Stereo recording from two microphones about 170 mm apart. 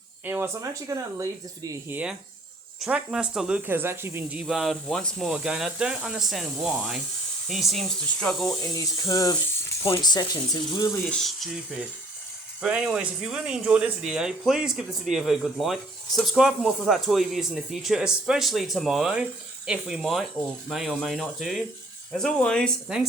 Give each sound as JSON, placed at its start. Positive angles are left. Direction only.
{"t": 0.3, "sound": "speech", "side_deg": -15}
{"t": 2.8, "sound": "speech", "side_deg": -5}
{"t": 8.6, "sound": "speech", "side_deg": 20}
{"t": 11.0, "sound": "speech", "side_deg": 0}